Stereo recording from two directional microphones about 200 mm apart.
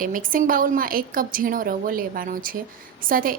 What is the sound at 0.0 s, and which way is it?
A woman's voice, 45° right (ahead or behind).